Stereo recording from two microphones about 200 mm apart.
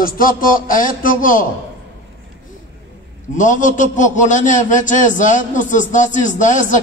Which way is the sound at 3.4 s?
40° left (ahead or behind).